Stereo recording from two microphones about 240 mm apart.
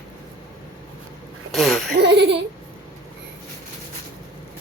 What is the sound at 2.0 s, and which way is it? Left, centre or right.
Laughter, right.